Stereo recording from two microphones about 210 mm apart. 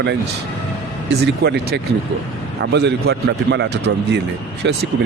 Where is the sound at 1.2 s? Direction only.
50° right (ahead or behind).